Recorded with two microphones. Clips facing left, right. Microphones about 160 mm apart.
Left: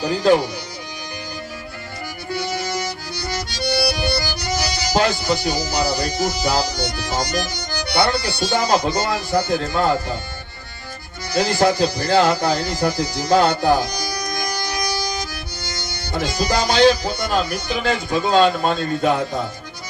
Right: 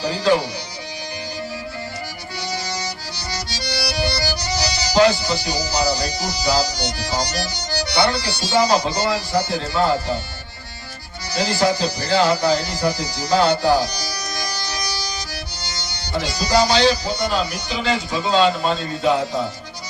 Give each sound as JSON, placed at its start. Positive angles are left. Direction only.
{"t": 0.0, "sound": "speech", "side_deg": 50}
{"t": 2.3, "sound": "music", "side_deg": 50}
{"t": 7.9, "sound": "speech", "side_deg": 50}
{"t": 11.3, "sound": "speech", "side_deg": 50}